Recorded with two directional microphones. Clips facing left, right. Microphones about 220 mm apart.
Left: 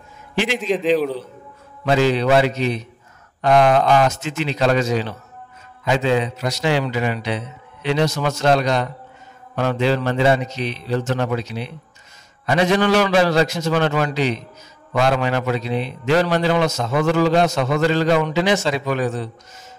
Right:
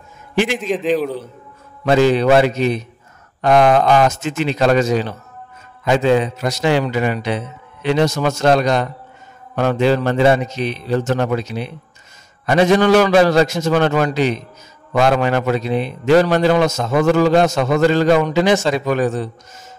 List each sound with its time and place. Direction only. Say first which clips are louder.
0.6 s a man's voice: even; centre (ahead or behind)
1.9 s a man's voice: right 4 dB; 50° right (ahead or behind)